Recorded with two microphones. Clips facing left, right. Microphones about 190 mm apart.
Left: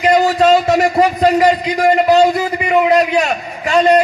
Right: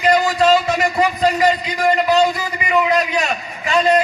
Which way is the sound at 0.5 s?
50° left (ahead or behind).